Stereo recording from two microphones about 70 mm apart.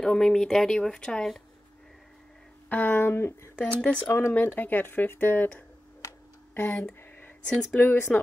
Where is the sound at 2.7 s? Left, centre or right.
Left.